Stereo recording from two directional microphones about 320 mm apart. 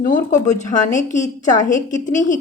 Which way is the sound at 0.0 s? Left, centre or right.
Left.